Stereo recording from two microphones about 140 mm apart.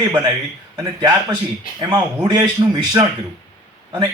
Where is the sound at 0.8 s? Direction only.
30° right (ahead or behind).